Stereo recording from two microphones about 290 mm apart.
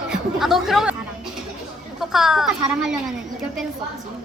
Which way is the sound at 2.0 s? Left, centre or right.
Centre.